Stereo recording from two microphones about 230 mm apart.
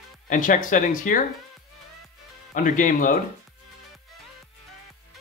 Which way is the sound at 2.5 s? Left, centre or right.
Left.